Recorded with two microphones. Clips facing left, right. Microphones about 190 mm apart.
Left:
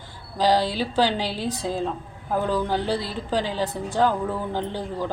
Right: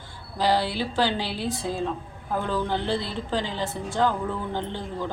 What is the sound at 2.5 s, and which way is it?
Speech, 10° left (ahead or behind).